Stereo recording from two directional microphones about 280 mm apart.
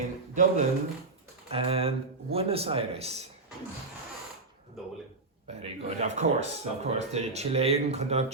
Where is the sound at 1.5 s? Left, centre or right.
Right.